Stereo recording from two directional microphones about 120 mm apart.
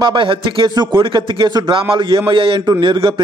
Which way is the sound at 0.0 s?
45° right (ahead or behind).